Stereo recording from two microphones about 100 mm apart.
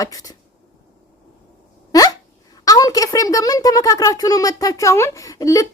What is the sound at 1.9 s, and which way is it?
Speech, 40° left (ahead or behind).